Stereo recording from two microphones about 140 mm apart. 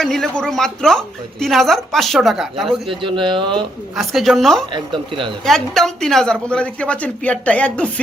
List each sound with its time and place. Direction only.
0.0 s a woman's voice: 5° left (ahead or behind)
2.9 s speech: 35° right (ahead or behind)
3.9 s a woman's voice: centre (ahead or behind)
4.7 s speech: 35° right (ahead or behind)
5.5 s speech: centre (ahead or behind)